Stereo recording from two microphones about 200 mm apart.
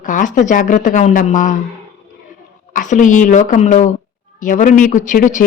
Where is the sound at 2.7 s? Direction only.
40° left (ahead or behind).